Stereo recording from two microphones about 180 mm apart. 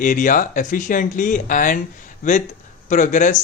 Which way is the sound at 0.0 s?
45° left (ahead or behind).